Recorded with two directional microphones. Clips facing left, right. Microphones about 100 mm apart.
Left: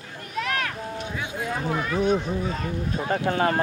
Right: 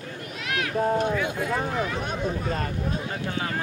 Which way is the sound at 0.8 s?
55° right (ahead or behind).